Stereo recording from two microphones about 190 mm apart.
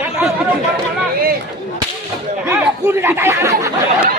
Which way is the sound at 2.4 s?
10° right (ahead or behind).